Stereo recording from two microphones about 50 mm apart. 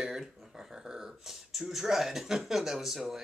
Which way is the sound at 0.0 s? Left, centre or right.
Centre.